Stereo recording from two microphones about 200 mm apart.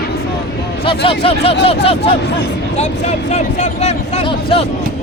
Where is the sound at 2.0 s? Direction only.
60° left (ahead or behind).